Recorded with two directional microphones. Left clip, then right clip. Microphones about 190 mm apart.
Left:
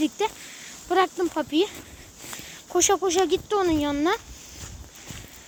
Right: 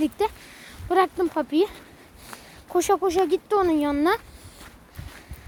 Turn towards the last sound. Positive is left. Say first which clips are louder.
# right 2 dB
turn(degrees=-10)  # may be behind; listen again after turning